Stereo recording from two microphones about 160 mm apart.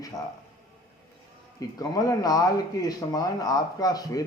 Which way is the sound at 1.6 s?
20° left (ahead or behind).